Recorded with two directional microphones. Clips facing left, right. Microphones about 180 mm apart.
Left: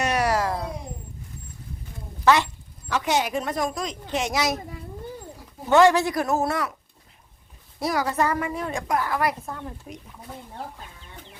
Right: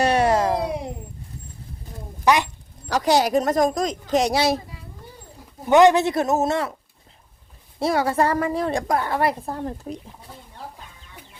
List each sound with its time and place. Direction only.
0.0 s music: 30° right (ahead or behind)
2.2 s speech: 15° right (ahead or behind)
2.9 s a woman's voice: 35° right (ahead or behind)
5.6 s a man's voice: 20° right (ahead or behind)
7.8 s a woman's voice: 30° right (ahead or behind)